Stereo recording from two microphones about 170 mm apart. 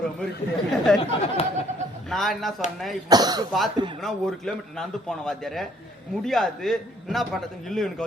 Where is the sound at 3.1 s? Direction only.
25° right (ahead or behind).